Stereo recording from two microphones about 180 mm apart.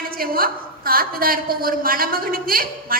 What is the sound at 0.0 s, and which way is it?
A woman's voice, 55° right (ahead or behind).